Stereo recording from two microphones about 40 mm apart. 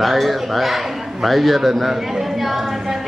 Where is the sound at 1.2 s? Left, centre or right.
Centre.